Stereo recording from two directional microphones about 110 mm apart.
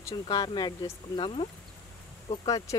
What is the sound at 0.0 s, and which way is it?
Speech, 35° left (ahead or behind).